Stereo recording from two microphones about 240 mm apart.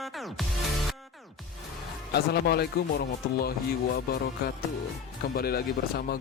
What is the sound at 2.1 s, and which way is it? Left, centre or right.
Speech, left.